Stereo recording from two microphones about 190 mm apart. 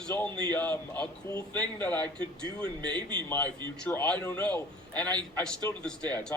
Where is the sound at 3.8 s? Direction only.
10° left (ahead or behind).